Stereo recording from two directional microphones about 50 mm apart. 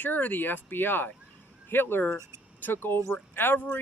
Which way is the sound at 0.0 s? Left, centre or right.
Left.